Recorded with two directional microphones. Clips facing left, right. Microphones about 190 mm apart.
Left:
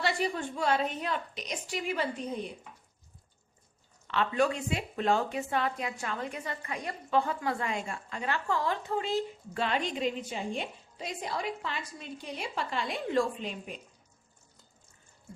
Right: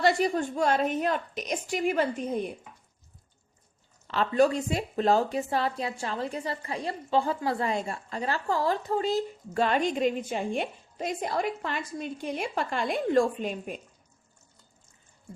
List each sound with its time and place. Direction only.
0.0 s a woman's voice: 45° right (ahead or behind)
4.0 s speech: 35° right (ahead or behind)